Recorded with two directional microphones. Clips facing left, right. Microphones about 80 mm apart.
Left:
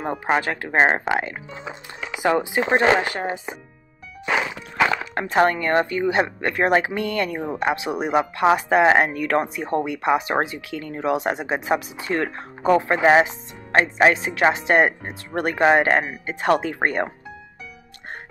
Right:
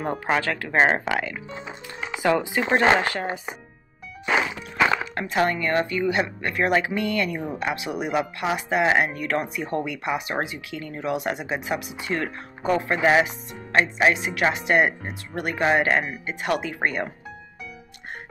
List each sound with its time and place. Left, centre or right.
0.0 s speech: left
5.1 s speech: left